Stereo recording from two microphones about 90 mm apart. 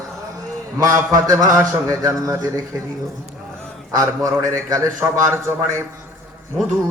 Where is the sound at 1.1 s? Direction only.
40° right (ahead or behind).